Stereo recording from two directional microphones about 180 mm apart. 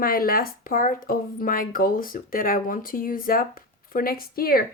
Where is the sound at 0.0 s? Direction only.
55° left (ahead or behind).